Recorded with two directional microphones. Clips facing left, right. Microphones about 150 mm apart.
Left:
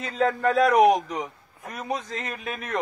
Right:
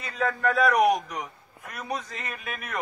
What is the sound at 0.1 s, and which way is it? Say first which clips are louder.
A man's voice: left 3 dB; 25° left (ahead or behind).